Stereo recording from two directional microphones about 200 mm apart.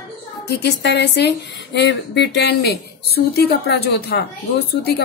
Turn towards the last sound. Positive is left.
turn(degrees=55)  # may be behind; listen again after turning